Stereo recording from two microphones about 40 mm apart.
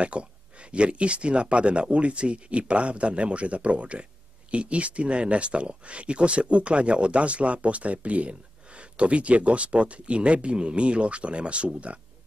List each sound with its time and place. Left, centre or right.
0.0 s speech: right